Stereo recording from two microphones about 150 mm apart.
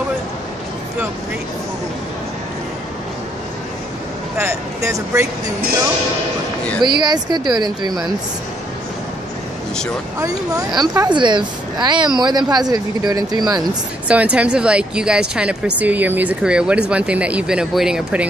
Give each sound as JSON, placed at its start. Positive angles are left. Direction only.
{"t": 4.4, "sound": "a sound", "side_deg": -20}
{"t": 6.8, "sound": "speech", "side_deg": -30}
{"t": 10.2, "sound": "a woman's voice", "side_deg": -25}
{"t": 14.0, "sound": "speech", "side_deg": -10}